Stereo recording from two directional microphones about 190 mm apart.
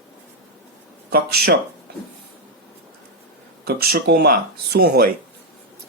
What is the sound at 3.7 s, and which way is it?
Speech, 55° right (ahead or behind).